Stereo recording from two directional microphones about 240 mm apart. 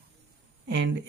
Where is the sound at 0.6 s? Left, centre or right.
Right.